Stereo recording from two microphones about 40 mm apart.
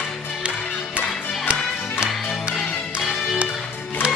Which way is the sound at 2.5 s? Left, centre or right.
Centre.